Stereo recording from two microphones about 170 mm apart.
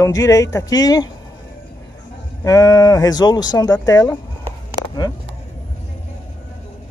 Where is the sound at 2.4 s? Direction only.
20° left (ahead or behind).